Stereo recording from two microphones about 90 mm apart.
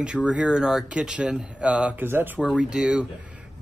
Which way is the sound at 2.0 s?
25° right (ahead or behind).